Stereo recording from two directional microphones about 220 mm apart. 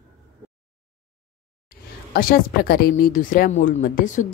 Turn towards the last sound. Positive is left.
turn(degrees=35)  # may be behind; listen again after turning